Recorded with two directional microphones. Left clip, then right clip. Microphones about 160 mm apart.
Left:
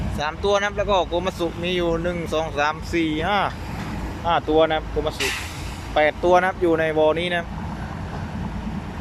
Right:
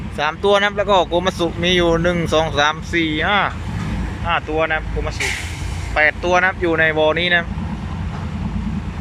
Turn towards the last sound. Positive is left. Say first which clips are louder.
# right 4 dB
turn(degrees=10)  # may be behind; listen again after turning